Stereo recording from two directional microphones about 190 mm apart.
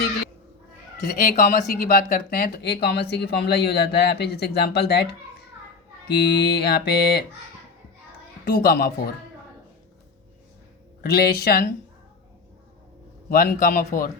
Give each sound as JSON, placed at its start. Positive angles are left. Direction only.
{"t": 1.0, "sound": "speech", "side_deg": 50}
{"t": 6.1, "sound": "speech", "side_deg": 60}
{"t": 8.4, "sound": "speech", "side_deg": 50}
{"t": 11.0, "sound": "speech", "side_deg": 55}
{"t": 13.3, "sound": "speech", "side_deg": 50}